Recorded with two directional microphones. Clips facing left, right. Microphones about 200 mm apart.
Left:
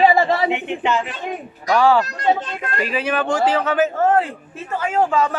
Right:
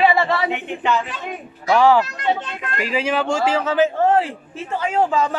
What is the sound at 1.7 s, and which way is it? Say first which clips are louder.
Speech: right 1 dB; 15° right (ahead or behind).